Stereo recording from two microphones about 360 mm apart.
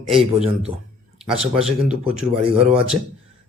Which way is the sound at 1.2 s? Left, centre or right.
Centre.